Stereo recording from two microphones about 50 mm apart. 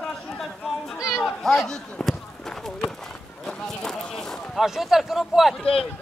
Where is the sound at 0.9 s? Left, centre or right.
Centre.